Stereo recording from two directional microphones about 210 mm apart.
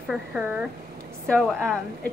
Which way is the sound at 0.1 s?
5° right (ahead or behind).